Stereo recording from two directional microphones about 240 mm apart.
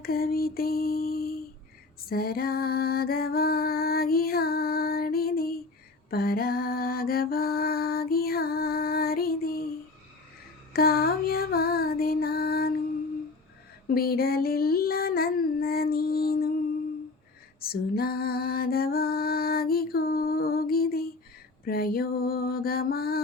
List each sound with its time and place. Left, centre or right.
0.0 s lullaby: left
2.0 s music: left
6.1 s lullaby: left
10.7 s music: left
13.8 s female singing: left
17.6 s music: left
21.6 s mantra: left